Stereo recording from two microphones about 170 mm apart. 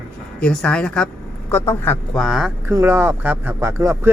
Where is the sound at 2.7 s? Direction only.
15° right (ahead or behind).